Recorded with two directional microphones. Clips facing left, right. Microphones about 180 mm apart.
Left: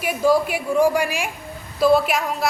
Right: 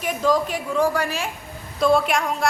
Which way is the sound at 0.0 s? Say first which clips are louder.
Left 3 dB; 10° left (ahead or behind).